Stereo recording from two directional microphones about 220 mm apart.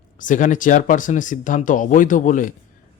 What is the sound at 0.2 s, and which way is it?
Speech, 35° left (ahead or behind).